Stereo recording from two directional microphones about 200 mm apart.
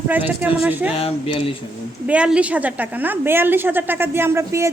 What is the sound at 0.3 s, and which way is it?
Speech, 10° right (ahead or behind).